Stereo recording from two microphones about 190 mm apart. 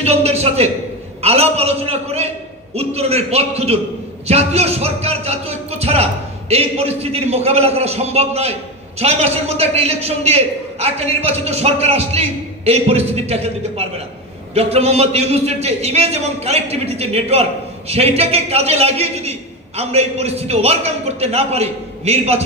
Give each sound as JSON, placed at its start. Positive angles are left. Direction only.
{"t": 0.0, "sound": "a man's voice", "side_deg": -35}